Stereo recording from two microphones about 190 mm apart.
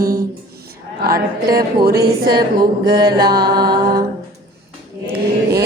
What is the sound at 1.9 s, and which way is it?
Speech, 55° right (ahead or behind).